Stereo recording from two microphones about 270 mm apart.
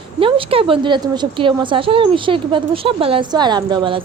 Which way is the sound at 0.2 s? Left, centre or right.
Centre.